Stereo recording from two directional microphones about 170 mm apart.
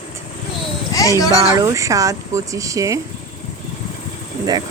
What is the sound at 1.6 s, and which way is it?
Speech, 20° right (ahead or behind).